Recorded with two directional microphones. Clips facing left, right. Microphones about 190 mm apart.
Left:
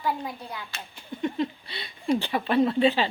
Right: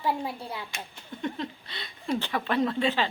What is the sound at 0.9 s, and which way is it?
Speech, 10° left (ahead or behind).